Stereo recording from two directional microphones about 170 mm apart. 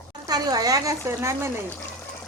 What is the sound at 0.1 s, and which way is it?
Speech, 25° right (ahead or behind).